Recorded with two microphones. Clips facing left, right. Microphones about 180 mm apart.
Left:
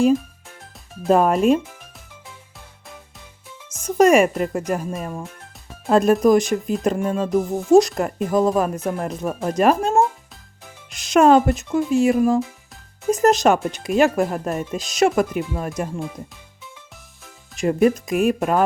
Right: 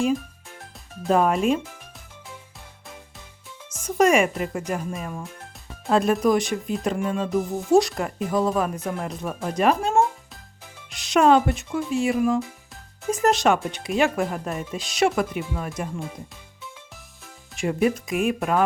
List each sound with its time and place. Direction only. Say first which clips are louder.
1.0 s speech: left 4 dB; 40° left (ahead or behind)
3.8 s speech: left 4 dB; 45° left (ahead or behind)
17.6 s speech: left 5 dB; 45° left (ahead or behind)